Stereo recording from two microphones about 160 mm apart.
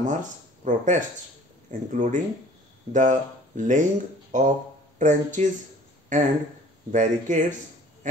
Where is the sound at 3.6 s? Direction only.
50° right (ahead or behind).